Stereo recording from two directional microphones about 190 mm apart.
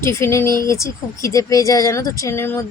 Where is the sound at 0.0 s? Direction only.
15° left (ahead or behind).